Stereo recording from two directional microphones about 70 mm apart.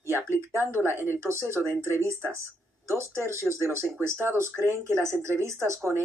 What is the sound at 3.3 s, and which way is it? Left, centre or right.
Speech, right.